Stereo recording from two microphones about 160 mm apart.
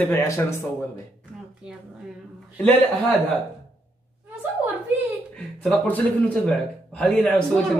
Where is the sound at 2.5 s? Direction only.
10° left (ahead or behind).